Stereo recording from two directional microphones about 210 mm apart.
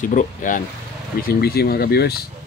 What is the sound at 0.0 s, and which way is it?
Speech, 40° left (ahead or behind).